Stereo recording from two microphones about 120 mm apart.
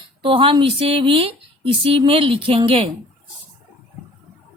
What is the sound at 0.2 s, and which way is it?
Speech, 45° right (ahead or behind).